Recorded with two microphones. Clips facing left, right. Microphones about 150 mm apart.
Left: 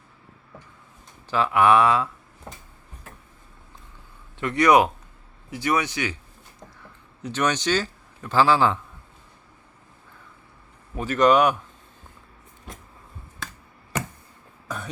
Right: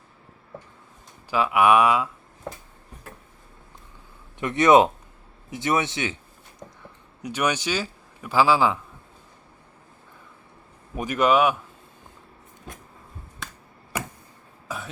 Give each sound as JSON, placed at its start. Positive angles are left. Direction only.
{"t": 1.3, "sound": "speech", "side_deg": -10}
{"t": 4.4, "sound": "a man's voice", "side_deg": -20}
{"t": 7.2, "sound": "a man's voice", "side_deg": -10}
{"t": 10.9, "sound": "speech", "side_deg": -15}
{"t": 13.9, "sound": "a sound", "side_deg": -10}
{"t": 14.7, "sound": "burping", "side_deg": -5}